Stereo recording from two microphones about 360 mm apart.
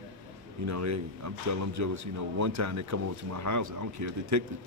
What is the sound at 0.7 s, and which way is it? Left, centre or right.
Speech, right.